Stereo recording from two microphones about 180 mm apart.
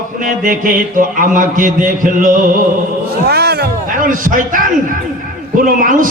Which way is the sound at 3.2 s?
60° right (ahead or behind).